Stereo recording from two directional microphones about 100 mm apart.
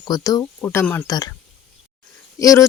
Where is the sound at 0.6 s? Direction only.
20° left (ahead or behind).